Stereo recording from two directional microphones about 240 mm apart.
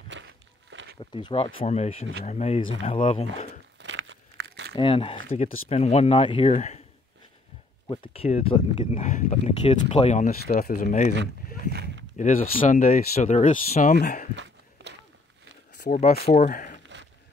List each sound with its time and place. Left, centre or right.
0.1 s walk: right
1.1 s speech: left
3.8 s crumpling: right
4.7 s speech: left
7.9 s speech: left
8.9 s speech: left
11.7 s a sound: right
12.2 s speech: left
14.3 s a sound: right
15.8 s speech: left